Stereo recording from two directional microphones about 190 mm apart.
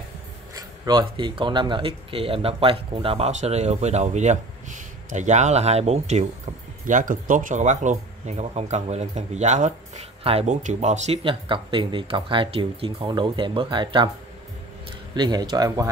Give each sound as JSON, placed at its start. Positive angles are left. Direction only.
{"t": 0.6, "sound": "speech", "side_deg": -20}
{"t": 15.1, "sound": "speech", "side_deg": -20}